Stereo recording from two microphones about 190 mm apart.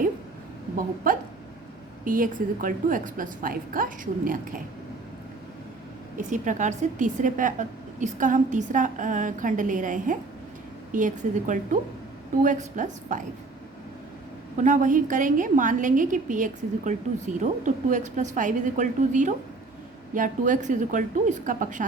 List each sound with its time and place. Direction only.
1.1 s a woman's voice: 45° right (ahead or behind)
6.1 s a woman's voice: 40° right (ahead or behind)
14.6 s a woman's voice: 40° right (ahead or behind)